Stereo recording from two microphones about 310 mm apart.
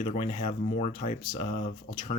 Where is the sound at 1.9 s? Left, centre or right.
Left.